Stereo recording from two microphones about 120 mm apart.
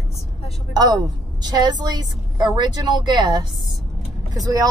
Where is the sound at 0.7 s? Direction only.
35° right (ahead or behind).